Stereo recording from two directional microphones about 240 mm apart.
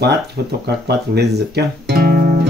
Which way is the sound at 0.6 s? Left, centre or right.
Right.